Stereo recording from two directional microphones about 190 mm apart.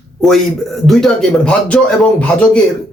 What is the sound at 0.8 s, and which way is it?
Speech, centre (ahead or behind).